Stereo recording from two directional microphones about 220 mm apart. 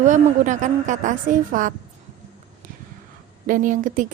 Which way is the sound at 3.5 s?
35° right (ahead or behind).